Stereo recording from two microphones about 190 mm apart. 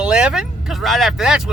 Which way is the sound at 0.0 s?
5° right (ahead or behind).